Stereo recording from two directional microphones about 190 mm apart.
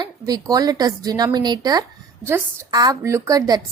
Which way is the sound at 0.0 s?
20° right (ahead or behind).